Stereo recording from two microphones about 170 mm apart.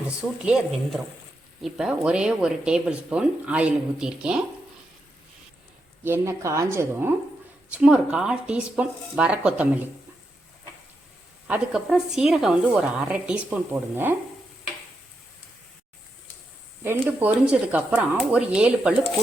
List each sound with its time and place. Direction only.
0.2 s speech: 5° right (ahead or behind)
6.0 s speech: 15° right (ahead or behind)
11.4 s speech: 5° right (ahead or behind)
16.8 s speech: 10° right (ahead or behind)